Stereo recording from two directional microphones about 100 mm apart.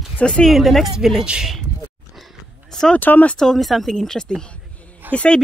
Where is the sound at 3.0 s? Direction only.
15° left (ahead or behind).